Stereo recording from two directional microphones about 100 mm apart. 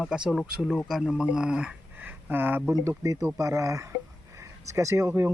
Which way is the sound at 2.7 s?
30° right (ahead or behind).